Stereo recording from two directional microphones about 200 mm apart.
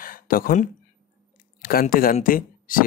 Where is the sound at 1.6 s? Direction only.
45° left (ahead or behind).